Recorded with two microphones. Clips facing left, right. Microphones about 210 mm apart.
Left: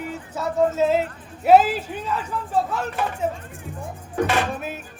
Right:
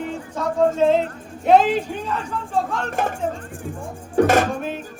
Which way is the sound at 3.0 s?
45° right (ahead or behind).